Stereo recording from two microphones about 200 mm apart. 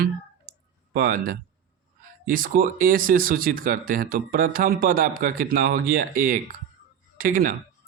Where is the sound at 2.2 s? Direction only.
45° right (ahead or behind).